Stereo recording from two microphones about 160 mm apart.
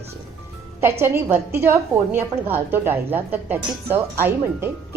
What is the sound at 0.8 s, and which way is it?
A woman's voice, 15° right (ahead or behind).